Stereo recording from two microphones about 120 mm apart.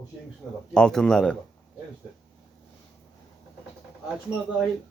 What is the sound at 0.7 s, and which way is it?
Speech, 5° left (ahead or behind).